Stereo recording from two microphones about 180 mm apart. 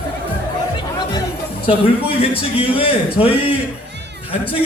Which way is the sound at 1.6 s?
30° left (ahead or behind).